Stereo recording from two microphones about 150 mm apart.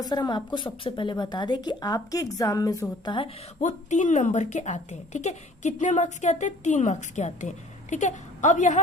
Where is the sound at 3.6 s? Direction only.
50° left (ahead or behind).